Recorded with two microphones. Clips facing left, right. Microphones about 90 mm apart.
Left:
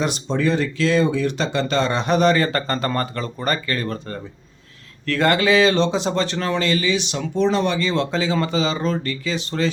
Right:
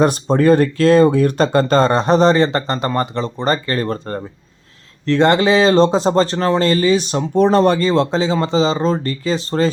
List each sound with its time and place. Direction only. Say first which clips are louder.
0.0 s speech: right 8 dB; 45° right (ahead or behind)
5.0 s speech: right 5 dB; 25° right (ahead or behind)